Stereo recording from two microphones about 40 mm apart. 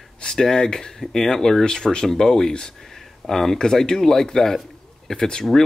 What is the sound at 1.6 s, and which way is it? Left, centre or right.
Speech, centre.